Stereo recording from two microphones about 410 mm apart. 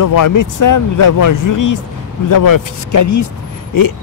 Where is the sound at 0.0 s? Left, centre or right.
Left.